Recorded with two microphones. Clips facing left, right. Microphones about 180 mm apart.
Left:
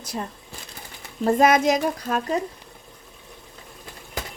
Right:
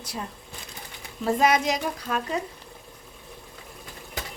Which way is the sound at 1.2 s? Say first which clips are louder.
Left 4 dB; 50° left (ahead or behind).